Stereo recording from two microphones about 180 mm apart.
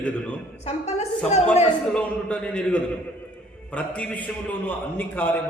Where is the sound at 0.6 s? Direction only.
35° left (ahead or behind).